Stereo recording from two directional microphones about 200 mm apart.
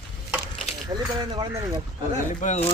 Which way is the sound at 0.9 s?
20° right (ahead or behind).